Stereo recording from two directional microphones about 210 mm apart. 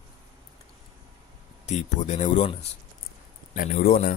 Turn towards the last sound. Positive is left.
turn(degrees=40)  # may be behind; listen again after turning